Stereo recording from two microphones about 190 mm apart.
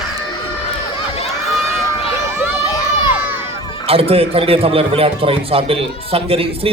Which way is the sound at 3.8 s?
30° right (ahead or behind).